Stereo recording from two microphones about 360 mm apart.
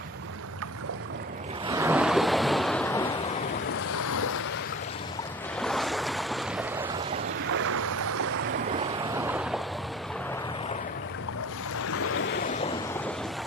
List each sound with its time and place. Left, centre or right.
1.7 s waves: centre
4.0 s a sound: left
5.6 s waves: centre
7.5 s boat: right
8.7 s boat: centre
11.9 s waves: left